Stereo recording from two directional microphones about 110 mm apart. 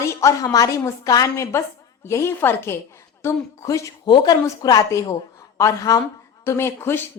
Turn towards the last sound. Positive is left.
turn(degrees=20)  # may be behind; listen again after turning